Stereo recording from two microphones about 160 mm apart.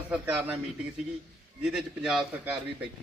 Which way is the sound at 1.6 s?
5° right (ahead or behind).